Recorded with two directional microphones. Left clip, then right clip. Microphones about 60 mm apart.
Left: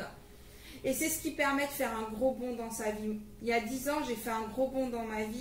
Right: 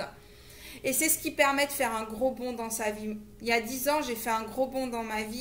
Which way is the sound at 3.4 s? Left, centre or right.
Right.